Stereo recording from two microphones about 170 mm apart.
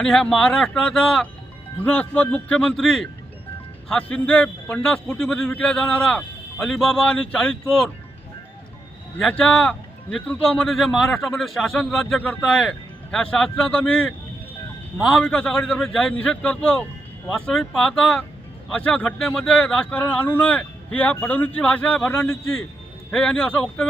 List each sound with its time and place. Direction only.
0.0 s a man's voice: 5° left (ahead or behind)
9.1 s a man's voice: 5° left (ahead or behind)